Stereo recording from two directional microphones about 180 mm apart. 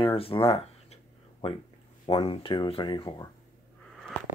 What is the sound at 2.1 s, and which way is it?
Speech, 30° left (ahead or behind).